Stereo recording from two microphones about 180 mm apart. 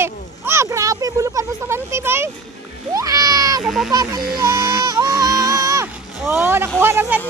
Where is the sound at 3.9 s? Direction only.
20° right (ahead or behind).